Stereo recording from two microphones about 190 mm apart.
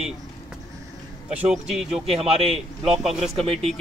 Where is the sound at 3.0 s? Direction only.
Centre (ahead or behind).